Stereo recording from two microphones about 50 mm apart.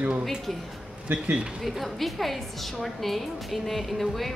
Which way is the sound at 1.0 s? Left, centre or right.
Right.